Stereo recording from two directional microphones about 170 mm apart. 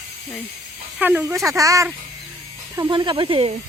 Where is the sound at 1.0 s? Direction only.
10° right (ahead or behind); by 3.5 s 30° right (ahead or behind).